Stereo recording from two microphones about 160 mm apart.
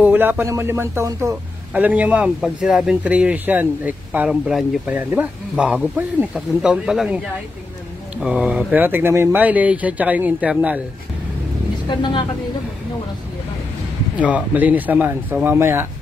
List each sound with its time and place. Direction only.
0.0 s speech: 10° right (ahead or behind)
8.2 s speech: 5° right (ahead or behind)
11.9 s a woman's voice: 30° left (ahead or behind)
14.1 s speech: 10° right (ahead or behind)